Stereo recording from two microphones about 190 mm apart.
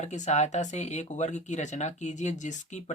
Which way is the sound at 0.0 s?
35° left (ahead or behind).